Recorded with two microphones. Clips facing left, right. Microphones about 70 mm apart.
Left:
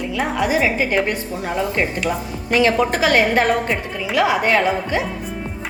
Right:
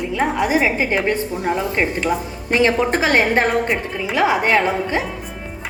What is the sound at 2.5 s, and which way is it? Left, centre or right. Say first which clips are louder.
A woman's voice: even; right.